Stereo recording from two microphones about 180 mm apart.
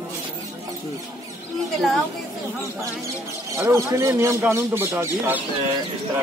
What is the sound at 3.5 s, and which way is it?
Speech, 15° right (ahead or behind).